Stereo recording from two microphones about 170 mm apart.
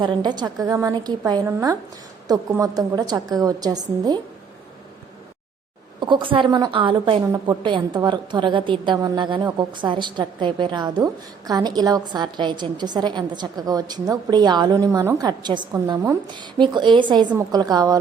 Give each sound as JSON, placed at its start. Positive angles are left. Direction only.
{"t": 0.0, "sound": "a woman's voice", "side_deg": -25}
{"t": 6.0, "sound": "a woman's voice", "side_deg": -25}